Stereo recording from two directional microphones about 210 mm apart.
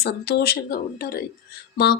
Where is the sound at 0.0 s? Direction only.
50° left (ahead or behind).